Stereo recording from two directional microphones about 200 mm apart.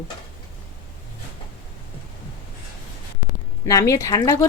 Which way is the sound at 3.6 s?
15° left (ahead or behind).